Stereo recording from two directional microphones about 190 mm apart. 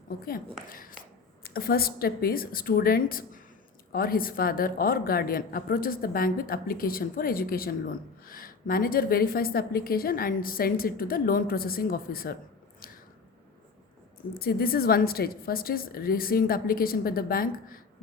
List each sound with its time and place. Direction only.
0.7 s a woman's voice: 45° left (ahead or behind)
12.8 s squish: 50° left (ahead or behind)
14.3 s a woman's voice: 50° left (ahead or behind)